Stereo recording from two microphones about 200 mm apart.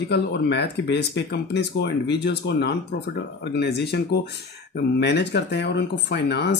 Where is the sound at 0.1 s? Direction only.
55° left (ahead or behind).